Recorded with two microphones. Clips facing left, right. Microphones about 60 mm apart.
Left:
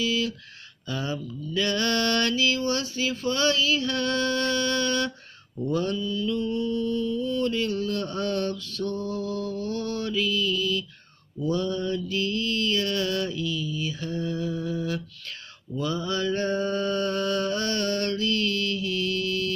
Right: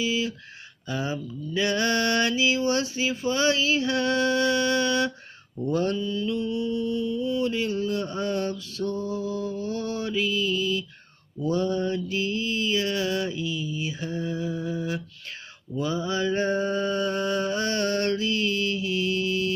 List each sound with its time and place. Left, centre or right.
0.0 s mantra: centre
5.7 s mantra: right